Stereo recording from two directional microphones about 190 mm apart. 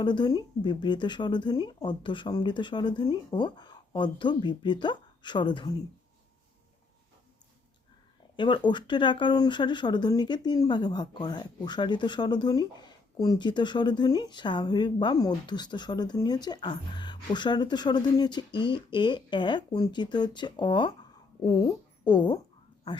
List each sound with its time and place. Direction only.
0.0 s speech: 25° left (ahead or behind)
8.4 s speech: 25° left (ahead or behind)